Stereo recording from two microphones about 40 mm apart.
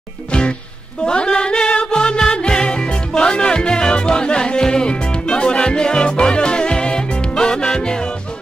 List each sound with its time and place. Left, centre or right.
1.0 s music: left